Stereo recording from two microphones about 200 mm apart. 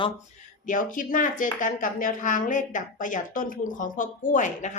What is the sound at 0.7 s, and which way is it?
A woman's voice, 40° left (ahead or behind).